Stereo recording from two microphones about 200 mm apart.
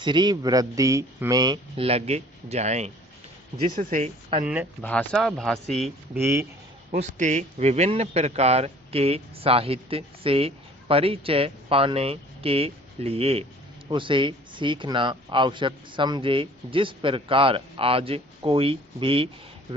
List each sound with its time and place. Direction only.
0.0 s a man's voice: 20° right (ahead or behind); by 4.1 s 40° right (ahead or behind)
4.3 s a man's voice: 25° right (ahead or behind)
4.8 s speech: 10° left (ahead or behind)
6.1 s speech: 15° right (ahead or behind)
6.9 s a man's voice: 35° right (ahead or behind)